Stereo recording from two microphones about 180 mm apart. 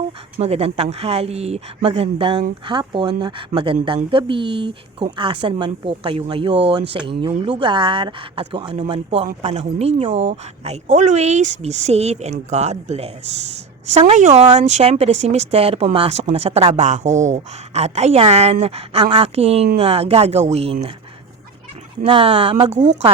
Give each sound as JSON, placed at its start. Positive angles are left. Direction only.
{"t": 0.3, "sound": "speech", "side_deg": -35}
{"t": 22.0, "sound": "speech", "side_deg": -30}
{"t": 22.8, "sound": "speech", "side_deg": -40}